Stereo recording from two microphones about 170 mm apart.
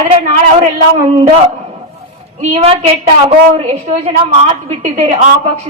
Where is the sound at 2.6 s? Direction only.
35° right (ahead or behind).